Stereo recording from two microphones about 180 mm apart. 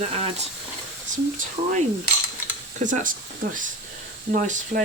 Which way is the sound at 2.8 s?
45° right (ahead or behind).